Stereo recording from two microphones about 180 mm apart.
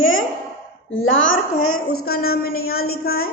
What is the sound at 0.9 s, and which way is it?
Speech, 90° left.